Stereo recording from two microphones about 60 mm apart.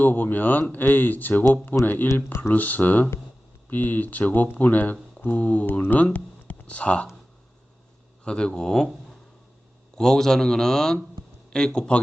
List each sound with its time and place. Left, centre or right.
0.0 s speech: left
8.2 s a man's voice: centre